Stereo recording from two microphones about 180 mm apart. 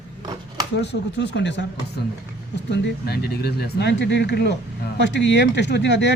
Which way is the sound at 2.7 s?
70° left (ahead or behind).